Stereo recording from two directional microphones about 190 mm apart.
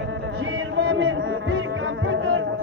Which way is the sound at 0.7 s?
90° right.